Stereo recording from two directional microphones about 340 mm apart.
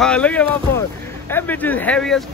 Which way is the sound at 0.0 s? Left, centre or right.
Centre.